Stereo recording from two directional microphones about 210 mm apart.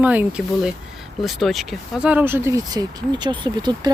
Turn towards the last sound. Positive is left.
turn(degrees=-20)  # may be behind; listen again after turning